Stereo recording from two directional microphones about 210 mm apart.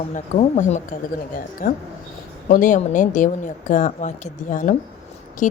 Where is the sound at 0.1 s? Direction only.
35° left (ahead or behind).